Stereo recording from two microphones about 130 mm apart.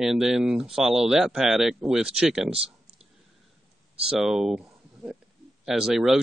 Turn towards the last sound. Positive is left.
turn(degrees=-5)  # may be behind; listen again after turning